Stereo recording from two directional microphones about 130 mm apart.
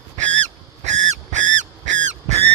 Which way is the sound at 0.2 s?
65° right (ahead or behind).